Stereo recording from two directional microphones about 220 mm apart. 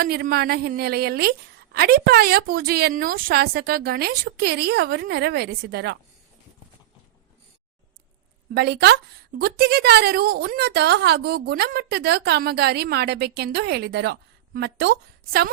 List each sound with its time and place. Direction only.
0.0 s a woman's voice: 45° right (ahead or behind)
8.5 s a woman's voice: 50° right (ahead or behind)